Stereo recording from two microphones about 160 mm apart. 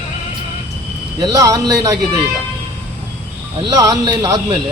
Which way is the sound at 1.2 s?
25° right (ahead or behind).